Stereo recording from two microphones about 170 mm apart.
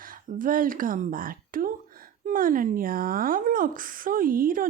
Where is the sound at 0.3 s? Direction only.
55° right (ahead or behind).